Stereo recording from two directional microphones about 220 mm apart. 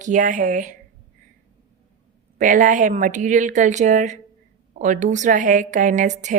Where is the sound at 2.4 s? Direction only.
35° right (ahead or behind).